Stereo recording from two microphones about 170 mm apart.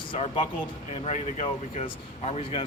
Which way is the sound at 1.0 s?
40° left (ahead or behind).